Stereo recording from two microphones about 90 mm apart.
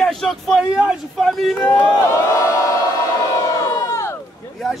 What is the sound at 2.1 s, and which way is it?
Crowd, 40° left (ahead or behind).